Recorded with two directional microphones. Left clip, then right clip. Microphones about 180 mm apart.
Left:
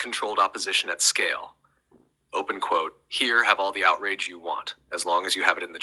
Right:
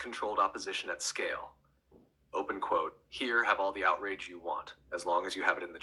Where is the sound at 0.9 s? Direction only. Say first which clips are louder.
Left 11 dB; 20° left (ahead or behind).